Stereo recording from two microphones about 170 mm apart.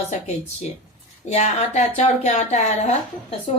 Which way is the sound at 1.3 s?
40° left (ahead or behind).